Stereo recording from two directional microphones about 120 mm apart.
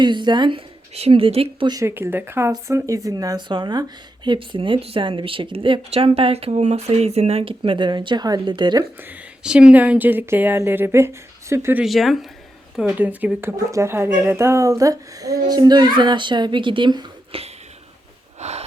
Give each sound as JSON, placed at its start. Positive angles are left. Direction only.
{"t": 0.0, "sound": "speech", "side_deg": -40}
{"t": 0.9, "sound": "speech", "side_deg": -55}
{"t": 1.7, "sound": "speech", "side_deg": -25}
{"t": 9.0, "sound": "speech", "side_deg": -10}
{"t": 11.8, "sound": "speech", "side_deg": 0}
{"t": 13.7, "sound": "speech", "side_deg": -25}
{"t": 17.3, "sound": "a sound", "side_deg": -50}
{"t": 18.3, "sound": "a sound", "side_deg": -65}